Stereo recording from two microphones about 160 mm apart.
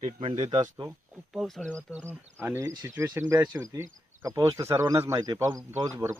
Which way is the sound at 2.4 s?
15° right (ahead or behind).